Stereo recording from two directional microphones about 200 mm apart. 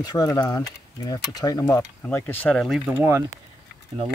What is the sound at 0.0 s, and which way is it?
Speech, 20° left (ahead or behind).